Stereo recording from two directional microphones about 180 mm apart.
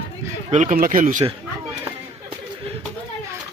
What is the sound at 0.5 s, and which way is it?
Speech, 45° right (ahead or behind).